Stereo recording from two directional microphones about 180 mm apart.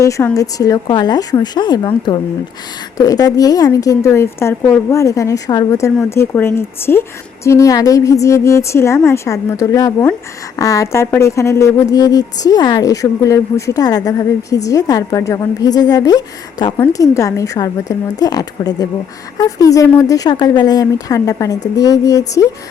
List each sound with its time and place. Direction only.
0.0 s a woman's voice: 15° left (ahead or behind)